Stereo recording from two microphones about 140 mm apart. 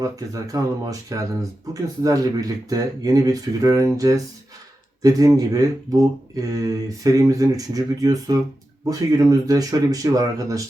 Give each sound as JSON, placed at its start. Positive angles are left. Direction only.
{"t": 0.0, "sound": "speech", "side_deg": -25}